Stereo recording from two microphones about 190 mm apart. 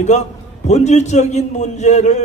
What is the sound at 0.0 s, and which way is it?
A man's voice, 35° left (ahead or behind).